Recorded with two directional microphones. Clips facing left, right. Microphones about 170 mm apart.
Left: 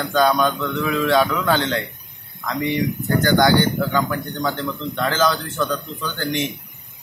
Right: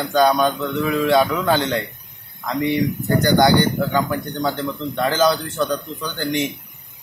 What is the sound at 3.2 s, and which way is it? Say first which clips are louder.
A man's voice: right 1 dB; 15° right (ahead or behind).